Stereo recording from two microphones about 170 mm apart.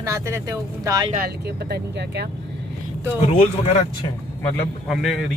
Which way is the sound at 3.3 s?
40° left (ahead or behind).